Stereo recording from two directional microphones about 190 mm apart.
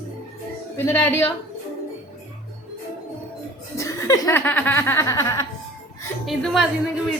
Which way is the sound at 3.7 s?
15° left (ahead or behind).